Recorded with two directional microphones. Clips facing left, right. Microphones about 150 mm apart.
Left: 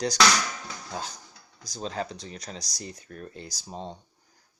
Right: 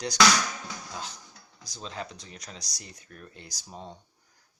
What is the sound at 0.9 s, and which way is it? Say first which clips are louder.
Speech: left 4 dB; 35° left (ahead or behind).